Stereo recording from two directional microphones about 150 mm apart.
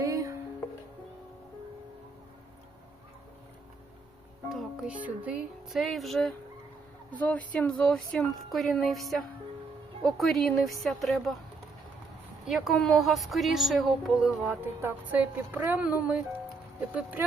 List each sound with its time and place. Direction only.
0.0 s music: 20° right (ahead or behind)
4.4 s a woman's voice: 5° right (ahead or behind)
12.5 s a woman's voice: centre (ahead or behind)